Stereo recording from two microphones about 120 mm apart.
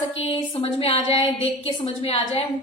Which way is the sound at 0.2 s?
55° left (ahead or behind).